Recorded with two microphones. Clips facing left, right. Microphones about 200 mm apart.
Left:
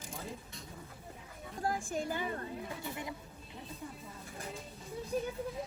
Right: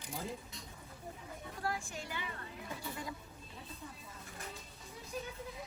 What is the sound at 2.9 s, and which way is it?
Speech, 20° left (ahead or behind).